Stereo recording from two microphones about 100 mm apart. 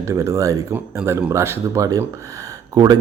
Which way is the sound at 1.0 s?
10° right (ahead or behind).